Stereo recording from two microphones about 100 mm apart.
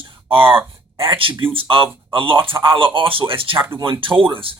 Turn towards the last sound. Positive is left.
turn(degrees=-60)  # may be behind; listen again after turning